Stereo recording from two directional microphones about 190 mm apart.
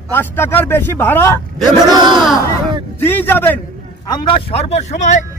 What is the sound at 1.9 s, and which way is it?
Speech, 25° right (ahead or behind).